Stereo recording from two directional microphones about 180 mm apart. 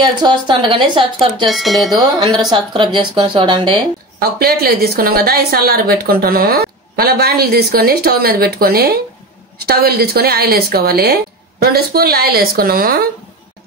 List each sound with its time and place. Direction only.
0.0 s speech: 25° right (ahead or behind)
1.5 s speech: centre (ahead or behind)
2.0 s speech: 25° right (ahead or behind)
4.2 s a woman's voice: 60° right (ahead or behind)